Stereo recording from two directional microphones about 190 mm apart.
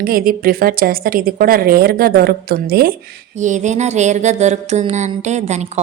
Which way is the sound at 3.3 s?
40° right (ahead or behind).